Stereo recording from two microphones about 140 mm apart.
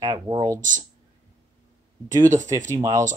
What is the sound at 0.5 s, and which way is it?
Speech, 65° right (ahead or behind).